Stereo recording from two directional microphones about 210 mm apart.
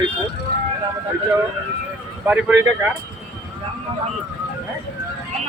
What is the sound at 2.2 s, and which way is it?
Speech, 10° right (ahead or behind).